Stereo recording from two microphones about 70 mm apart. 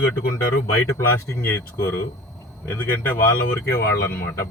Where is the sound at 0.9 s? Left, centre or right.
Left.